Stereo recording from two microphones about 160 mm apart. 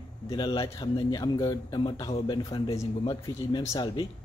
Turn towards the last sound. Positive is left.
turn(degrees=25)  # may be behind; listen again after turning